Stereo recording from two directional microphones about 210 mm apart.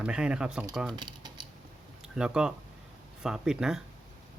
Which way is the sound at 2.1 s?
5° right (ahead or behind).